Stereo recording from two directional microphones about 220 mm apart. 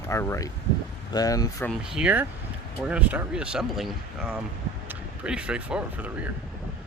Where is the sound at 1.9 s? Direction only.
5° right (ahead or behind).